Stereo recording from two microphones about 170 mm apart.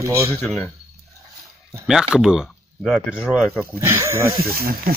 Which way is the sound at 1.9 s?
5° right (ahead or behind).